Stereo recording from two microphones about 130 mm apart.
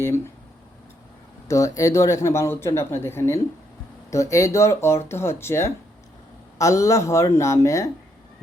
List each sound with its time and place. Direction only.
1.5 s speech: 25° left (ahead or behind)